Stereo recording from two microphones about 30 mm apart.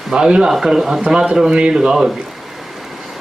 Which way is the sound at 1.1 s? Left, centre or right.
Right.